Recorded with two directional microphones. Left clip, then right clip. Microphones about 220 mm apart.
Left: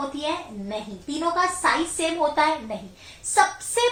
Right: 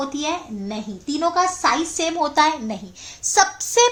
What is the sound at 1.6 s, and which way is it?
A woman's voice, 50° right (ahead or behind).